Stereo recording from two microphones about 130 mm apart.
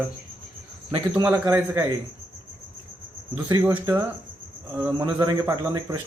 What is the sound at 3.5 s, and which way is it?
Speech, 25° right (ahead or behind).